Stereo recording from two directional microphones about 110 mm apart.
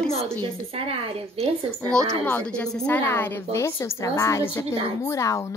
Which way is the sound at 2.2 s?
10° left (ahead or behind).